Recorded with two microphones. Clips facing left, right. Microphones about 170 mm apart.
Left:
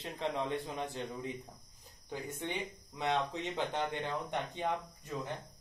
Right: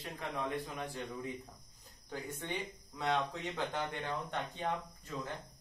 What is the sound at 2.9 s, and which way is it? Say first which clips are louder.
Speech: left 1 dB; 20° left (ahead or behind).